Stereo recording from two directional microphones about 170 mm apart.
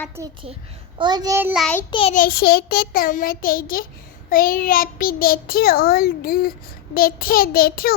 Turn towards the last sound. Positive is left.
turn(degrees=60)  # may be behind; listen again after turning